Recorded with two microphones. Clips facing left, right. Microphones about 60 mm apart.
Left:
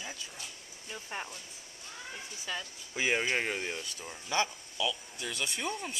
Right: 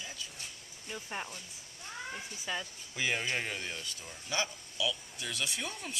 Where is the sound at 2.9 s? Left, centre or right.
Left.